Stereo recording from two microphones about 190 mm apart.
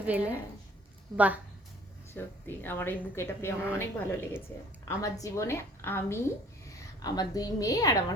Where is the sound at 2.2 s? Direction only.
10° left (ahead or behind).